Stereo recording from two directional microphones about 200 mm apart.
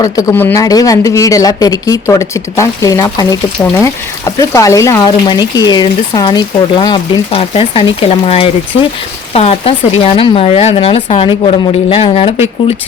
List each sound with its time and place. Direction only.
0.0 s speech: 15° left (ahead or behind)